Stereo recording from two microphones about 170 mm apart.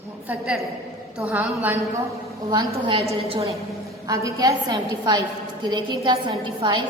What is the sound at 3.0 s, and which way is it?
Speech, 35° right (ahead or behind).